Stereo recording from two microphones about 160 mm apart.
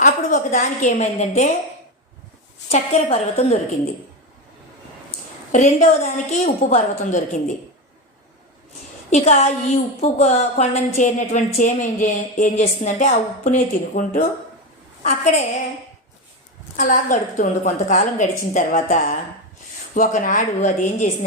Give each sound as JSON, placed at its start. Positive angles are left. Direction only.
{"t": 0.0, "sound": "a woman's voice", "side_deg": 55}
{"t": 2.6, "sound": "a woman's voice", "side_deg": 45}
{"t": 5.5, "sound": "a woman's voice", "side_deg": 50}
{"t": 9.0, "sound": "a woman's voice", "side_deg": 45}
{"t": 16.7, "sound": "a woman's voice", "side_deg": 50}